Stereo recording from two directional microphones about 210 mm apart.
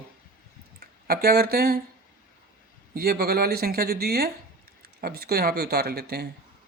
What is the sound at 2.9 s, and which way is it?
Speech, 45° right (ahead or behind).